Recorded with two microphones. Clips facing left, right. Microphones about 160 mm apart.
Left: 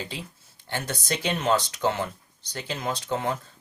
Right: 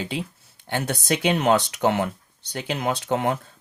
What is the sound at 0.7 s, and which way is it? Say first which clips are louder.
Speech: right 5 dB; 65° right (ahead or behind).